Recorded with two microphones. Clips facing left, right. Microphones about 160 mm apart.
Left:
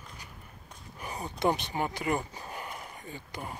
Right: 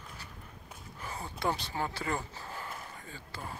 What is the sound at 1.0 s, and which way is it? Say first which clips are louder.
Speech: left 5 dB; 15° left (ahead or behind).